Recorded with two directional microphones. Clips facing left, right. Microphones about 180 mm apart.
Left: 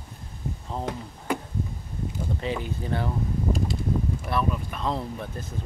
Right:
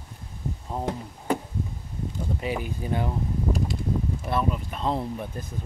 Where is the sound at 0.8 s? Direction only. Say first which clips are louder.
Right 3 dB; 30° right (ahead or behind).